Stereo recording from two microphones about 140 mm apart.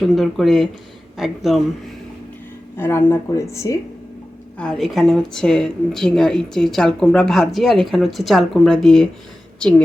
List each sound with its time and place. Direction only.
0.0 s a woman's voice: centre (ahead or behind)
2.7 s speech: 15° left (ahead or behind)
4.5 s a woman's voice: 5° left (ahead or behind)